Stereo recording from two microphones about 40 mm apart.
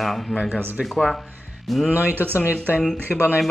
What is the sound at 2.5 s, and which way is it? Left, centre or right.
Speech, left.